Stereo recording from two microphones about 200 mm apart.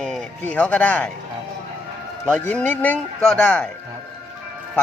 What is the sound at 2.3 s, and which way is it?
Speech, 5° left (ahead or behind).